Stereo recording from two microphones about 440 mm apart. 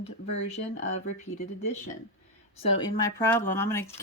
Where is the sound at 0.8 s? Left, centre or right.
Centre.